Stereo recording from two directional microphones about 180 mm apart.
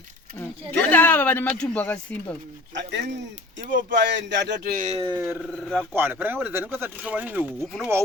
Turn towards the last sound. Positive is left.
turn(degrees=0)  # may be behind; listen again after turning